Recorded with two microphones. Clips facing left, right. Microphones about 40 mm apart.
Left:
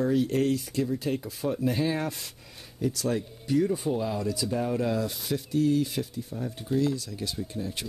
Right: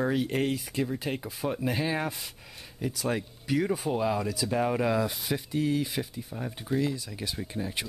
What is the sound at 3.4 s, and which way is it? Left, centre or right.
Speech, right.